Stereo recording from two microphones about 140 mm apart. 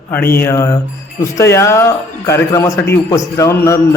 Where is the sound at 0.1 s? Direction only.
15° left (ahead or behind).